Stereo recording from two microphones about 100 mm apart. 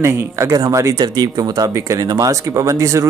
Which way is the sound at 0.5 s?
35° right (ahead or behind).